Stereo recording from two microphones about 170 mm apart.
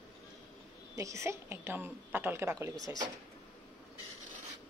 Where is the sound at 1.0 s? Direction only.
15° right (ahead or behind).